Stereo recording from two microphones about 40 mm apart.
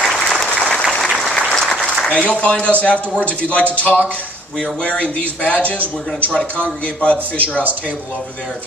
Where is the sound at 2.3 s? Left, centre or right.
Left.